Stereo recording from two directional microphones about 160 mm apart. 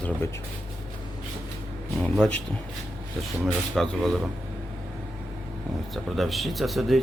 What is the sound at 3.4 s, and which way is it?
Speech, centre (ahead or behind).